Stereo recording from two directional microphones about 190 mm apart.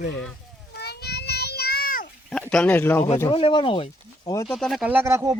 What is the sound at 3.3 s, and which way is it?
Speech, 25° left (ahead or behind).